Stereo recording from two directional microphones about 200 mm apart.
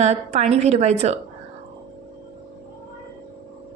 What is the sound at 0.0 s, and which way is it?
A woman's voice, 35° right (ahead or behind).